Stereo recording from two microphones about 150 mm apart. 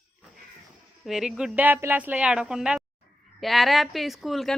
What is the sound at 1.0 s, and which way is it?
A woman's voice, centre (ahead or behind).